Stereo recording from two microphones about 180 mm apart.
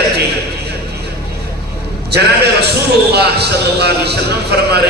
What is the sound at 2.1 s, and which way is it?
A man's voice, 65° right (ahead or behind).